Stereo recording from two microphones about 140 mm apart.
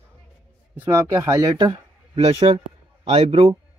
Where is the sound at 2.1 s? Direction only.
45° right (ahead or behind).